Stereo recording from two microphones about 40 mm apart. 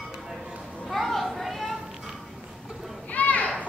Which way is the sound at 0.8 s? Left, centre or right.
Centre.